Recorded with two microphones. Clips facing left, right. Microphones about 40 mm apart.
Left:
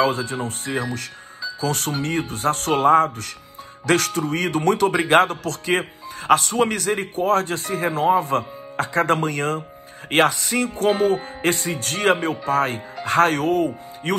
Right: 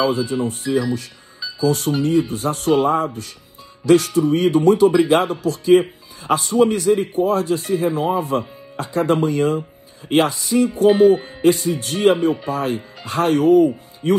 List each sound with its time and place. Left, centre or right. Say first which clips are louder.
0.0 s speech: right 2 dB; left